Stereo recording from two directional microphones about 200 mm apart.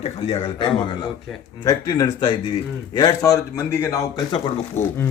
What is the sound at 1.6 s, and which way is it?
Speech, 15° left (ahead or behind).